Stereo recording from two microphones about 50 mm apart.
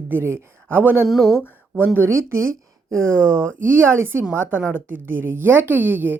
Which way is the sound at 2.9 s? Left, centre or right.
Right.